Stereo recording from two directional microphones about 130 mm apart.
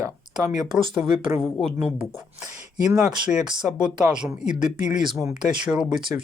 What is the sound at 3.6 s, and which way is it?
Speech, 10° right (ahead or behind).